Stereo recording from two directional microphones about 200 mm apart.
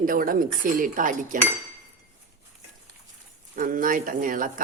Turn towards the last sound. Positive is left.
turn(degrees=-45)  # may be behind; listen again after turning